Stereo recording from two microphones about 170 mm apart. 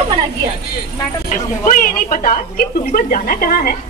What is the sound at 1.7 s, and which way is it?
A woman's voice, 50° left (ahead or behind).